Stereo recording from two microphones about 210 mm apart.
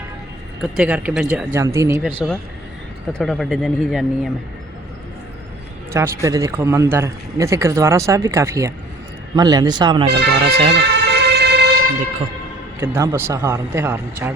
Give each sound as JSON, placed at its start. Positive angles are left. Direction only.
{"t": 0.6, "sound": "speech", "side_deg": -5}
{"t": 3.1, "sound": "speech", "side_deg": 5}
{"t": 5.9, "sound": "speech", "side_deg": -15}
{"t": 10.1, "sound": "speech", "side_deg": -50}
{"t": 10.8, "sound": "vehicle", "side_deg": -55}
{"t": 12.8, "sound": "speech", "side_deg": -15}